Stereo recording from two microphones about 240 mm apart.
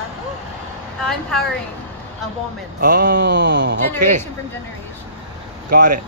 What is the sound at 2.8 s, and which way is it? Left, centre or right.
Speech, right.